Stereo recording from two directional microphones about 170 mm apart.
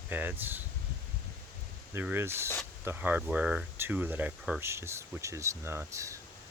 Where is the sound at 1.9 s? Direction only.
10° right (ahead or behind).